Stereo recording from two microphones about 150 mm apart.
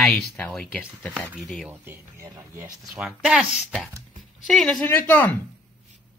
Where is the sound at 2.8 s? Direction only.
5° right (ahead or behind).